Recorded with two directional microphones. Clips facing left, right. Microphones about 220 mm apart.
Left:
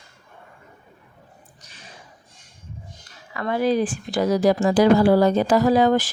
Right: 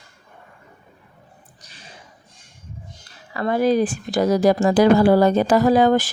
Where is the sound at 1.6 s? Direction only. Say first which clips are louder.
Right 1 dB; 35° right (ahead or behind).